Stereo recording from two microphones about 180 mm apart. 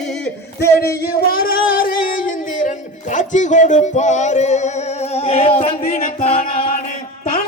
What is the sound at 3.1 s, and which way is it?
Music, 45° left (ahead or behind).